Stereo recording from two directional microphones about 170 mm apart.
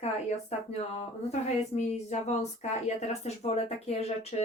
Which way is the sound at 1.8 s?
40° left (ahead or behind).